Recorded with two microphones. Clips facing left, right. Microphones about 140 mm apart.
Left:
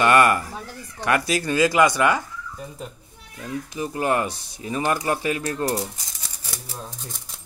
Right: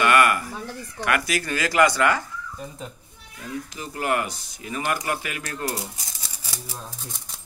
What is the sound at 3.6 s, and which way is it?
Speech, 20° left (ahead or behind).